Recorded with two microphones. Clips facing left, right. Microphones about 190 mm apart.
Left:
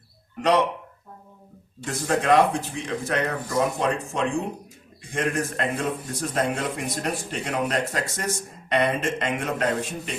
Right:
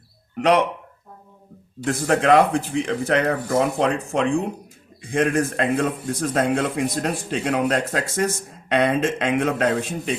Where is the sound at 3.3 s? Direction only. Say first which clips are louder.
Right 5 dB; 50° right (ahead or behind).